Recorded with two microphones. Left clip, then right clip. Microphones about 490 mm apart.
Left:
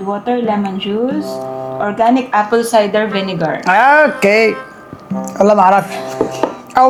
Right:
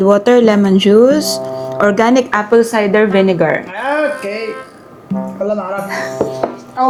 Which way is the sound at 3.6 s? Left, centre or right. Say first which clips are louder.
Left 8 dB; left.